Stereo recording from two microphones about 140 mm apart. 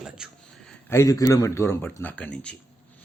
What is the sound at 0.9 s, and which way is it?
A man's voice, 20° left (ahead or behind).